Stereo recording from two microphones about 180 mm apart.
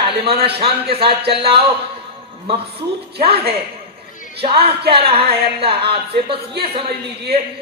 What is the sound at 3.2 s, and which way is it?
A man's voice, 30° right (ahead or behind).